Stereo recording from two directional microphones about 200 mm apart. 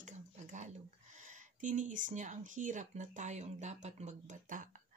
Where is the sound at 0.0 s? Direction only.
35° right (ahead or behind).